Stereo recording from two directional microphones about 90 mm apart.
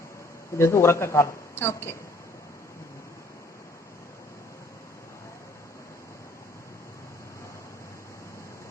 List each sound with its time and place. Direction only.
0.5 s speech: 30° left (ahead or behind)